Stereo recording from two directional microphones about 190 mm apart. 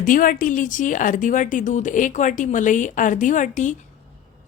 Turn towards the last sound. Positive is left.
turn(degrees=40)  # may be behind; listen again after turning